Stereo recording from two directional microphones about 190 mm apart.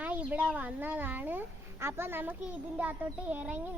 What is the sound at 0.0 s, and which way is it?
A child's voice, 10° right (ahead or behind).